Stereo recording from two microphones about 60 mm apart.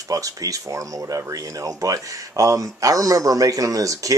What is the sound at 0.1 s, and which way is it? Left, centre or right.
Speech, right.